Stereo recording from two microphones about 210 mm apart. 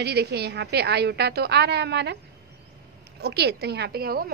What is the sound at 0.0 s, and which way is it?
A woman's voice, 50° right (ahead or behind).